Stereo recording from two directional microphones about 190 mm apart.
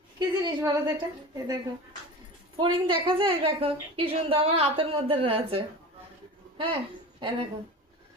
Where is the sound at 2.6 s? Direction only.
25° right (ahead or behind).